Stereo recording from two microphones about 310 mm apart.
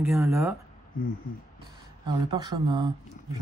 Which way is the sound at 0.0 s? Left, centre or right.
Centre.